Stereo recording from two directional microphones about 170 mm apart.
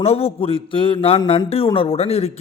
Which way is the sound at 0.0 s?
35° left (ahead or behind).